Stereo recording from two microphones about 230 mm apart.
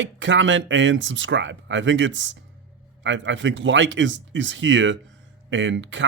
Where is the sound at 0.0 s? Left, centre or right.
Right.